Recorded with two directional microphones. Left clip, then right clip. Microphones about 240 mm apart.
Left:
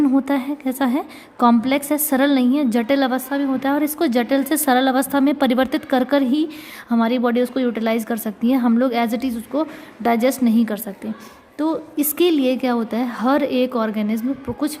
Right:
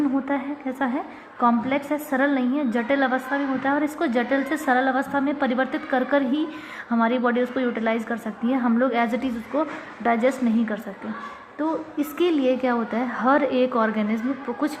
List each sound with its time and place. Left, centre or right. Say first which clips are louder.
0.3 s a woman's voice: left 5 dB; left